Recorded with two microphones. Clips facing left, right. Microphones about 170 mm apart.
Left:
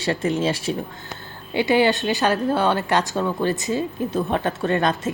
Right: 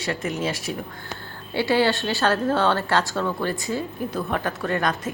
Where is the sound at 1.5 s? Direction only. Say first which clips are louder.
Left 2 dB; 15° left (ahead or behind).